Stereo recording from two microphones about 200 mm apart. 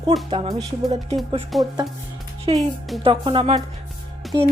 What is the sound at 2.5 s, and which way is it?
Speech, 30° right (ahead or behind).